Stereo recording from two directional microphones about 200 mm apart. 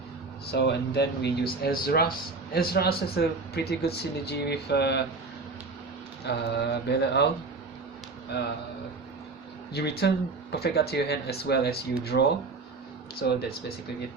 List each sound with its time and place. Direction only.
0.4 s speech: 55° left (ahead or behind)
6.2 s speech: 55° left (ahead or behind)
8.3 s speech: 55° left (ahead or behind)
9.7 s speech: 55° left (ahead or behind)